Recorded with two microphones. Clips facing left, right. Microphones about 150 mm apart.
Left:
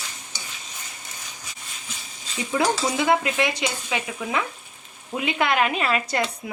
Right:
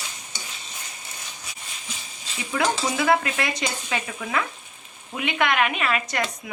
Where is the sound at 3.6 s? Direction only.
10° left (ahead or behind).